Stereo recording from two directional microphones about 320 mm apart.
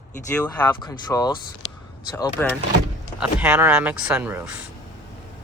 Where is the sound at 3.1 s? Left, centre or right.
Centre.